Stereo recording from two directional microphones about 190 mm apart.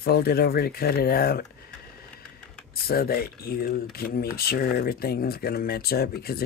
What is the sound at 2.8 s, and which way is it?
Speech, 50° left (ahead or behind).